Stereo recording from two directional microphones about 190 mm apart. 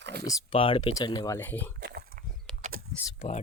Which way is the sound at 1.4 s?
10° left (ahead or behind).